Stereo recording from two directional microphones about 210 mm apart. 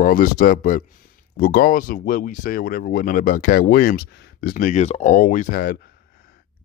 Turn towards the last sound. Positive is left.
turn(degrees=40)  # may be behind; listen again after turning